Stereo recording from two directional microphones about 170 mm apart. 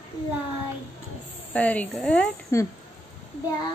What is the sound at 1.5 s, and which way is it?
Speech, 10° left (ahead or behind).